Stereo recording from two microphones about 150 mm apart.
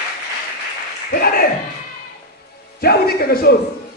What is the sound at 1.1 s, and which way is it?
Speech, 80° left.